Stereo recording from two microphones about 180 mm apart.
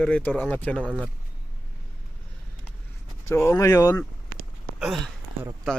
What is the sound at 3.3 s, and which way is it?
Speech, 15° left (ahead or behind).